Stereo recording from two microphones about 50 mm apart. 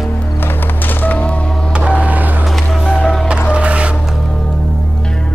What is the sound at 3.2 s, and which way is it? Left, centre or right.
Music, right.